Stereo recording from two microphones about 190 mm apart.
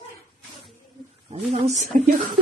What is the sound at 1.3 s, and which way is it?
Speech, 35° right (ahead or behind).